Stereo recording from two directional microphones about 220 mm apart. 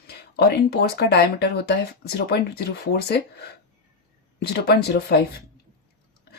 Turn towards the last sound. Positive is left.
turn(degrees=45)  # may be behind; listen again after turning